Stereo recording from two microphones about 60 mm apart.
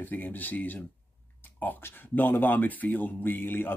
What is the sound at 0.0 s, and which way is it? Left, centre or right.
Speech, left.